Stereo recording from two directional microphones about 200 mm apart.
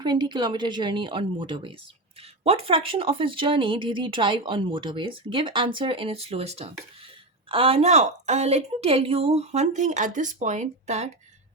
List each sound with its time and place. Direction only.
0.0 s a woman's voice: 20° right (ahead or behind)